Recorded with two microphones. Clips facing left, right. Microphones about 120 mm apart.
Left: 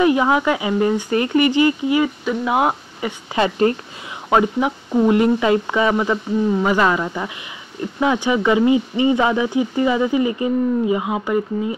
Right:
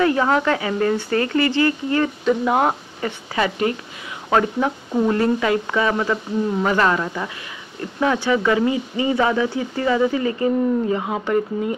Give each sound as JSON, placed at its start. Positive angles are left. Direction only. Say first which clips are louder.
{"t": 0.0, "sound": "speech", "louder": "left 2 dB", "side_deg": 15}
{"t": 3.3, "sound": "speech", "louder": "left 4 dB", "side_deg": 35}
{"t": 4.3, "sound": "speech", "louder": "left 2 dB", "side_deg": 15}